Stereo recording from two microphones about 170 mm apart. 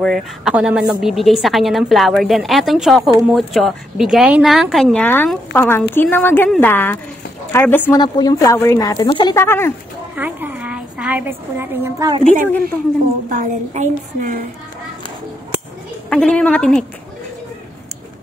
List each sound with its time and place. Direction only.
0.0 s a woman's voice: centre (ahead or behind)
7.9 s a woman's voice: 20° left (ahead or behind)
9.4 s speech: 15° left (ahead or behind)
10.1 s a woman's voice: 10° right (ahead or behind)
13.4 s a woman's voice: 50° right (ahead or behind)
16.1 s a woman's voice: 5° left (ahead or behind)